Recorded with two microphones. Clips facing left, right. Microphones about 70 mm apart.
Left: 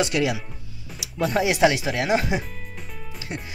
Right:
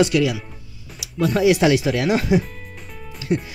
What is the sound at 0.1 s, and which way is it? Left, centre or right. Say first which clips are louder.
Speech: right 4 dB; left.